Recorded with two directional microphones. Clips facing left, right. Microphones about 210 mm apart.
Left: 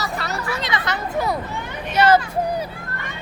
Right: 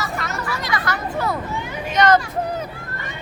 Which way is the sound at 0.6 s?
20° left (ahead or behind).